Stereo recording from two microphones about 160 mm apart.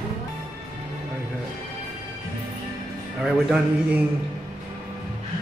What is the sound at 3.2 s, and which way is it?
Speech, 5° right (ahead or behind).